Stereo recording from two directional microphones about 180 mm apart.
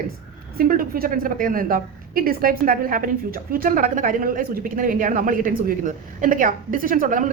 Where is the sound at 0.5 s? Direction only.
55° right (ahead or behind).